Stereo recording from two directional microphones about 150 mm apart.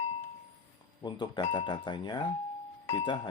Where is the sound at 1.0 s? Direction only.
30° left (ahead or behind).